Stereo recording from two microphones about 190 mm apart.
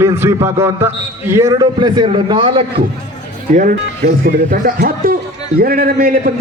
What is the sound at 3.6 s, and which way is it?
A man's voice, 50° right (ahead or behind).